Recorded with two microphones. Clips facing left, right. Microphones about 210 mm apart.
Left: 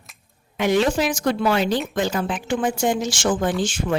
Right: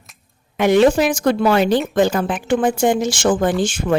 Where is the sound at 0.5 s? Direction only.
55° right (ahead or behind).